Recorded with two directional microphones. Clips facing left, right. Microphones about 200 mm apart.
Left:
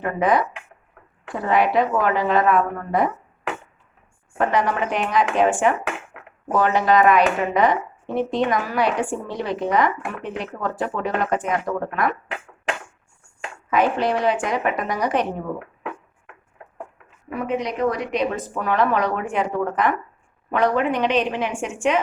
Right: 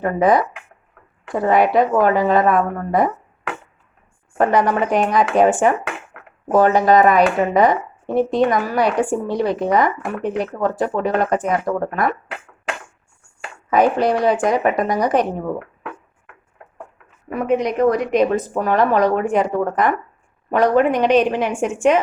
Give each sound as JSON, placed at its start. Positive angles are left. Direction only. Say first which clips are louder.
{"t": 0.0, "sound": "speech", "louder": "right 4 dB", "side_deg": -40}
{"t": 4.4, "sound": "speech", "louder": "right 5 dB", "side_deg": -40}
{"t": 13.7, "sound": "speech", "louder": "right 4 dB", "side_deg": -40}
{"t": 17.2, "sound": "a woman's voice", "louder": "right 6 dB", "side_deg": -50}